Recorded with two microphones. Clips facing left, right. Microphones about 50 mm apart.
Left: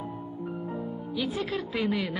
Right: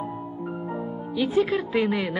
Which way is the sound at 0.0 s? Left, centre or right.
Right.